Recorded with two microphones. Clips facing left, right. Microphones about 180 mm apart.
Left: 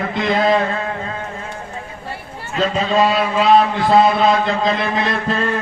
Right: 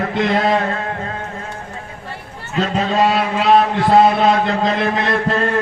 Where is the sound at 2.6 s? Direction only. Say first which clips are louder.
Left 1 dB; 60° right (ahead or behind).